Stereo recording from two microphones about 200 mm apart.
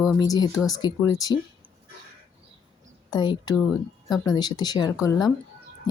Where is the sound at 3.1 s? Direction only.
20° left (ahead or behind).